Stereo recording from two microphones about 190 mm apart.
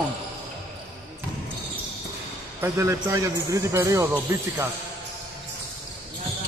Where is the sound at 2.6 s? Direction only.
15° right (ahead or behind).